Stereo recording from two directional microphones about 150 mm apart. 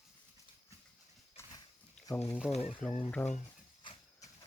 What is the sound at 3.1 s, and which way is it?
Speech, 5° left (ahead or behind).